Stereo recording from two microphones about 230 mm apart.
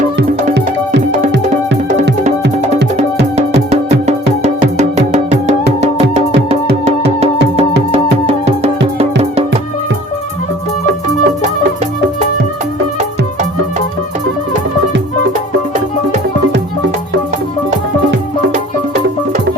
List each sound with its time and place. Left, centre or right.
3.3 s music: right
8.3 s music: right
10.8 s music: right